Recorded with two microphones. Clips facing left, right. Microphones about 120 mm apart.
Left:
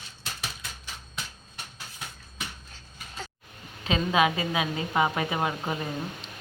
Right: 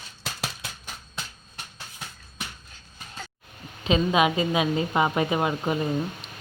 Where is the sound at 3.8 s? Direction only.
20° right (ahead or behind).